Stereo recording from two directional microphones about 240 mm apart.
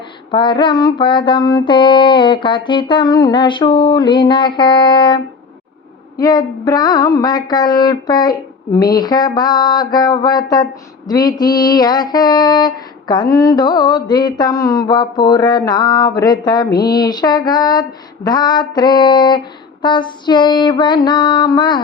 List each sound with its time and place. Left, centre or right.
0.3 s mantra: centre
6.1 s a sound: centre
19.8 s mantra: centre